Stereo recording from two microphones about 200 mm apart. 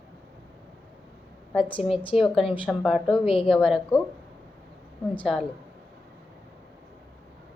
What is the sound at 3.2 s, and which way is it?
Speech, 25° left (ahead or behind).